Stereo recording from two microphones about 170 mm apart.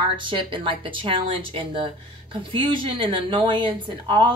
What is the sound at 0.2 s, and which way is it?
A woman's voice, 30° right (ahead or behind).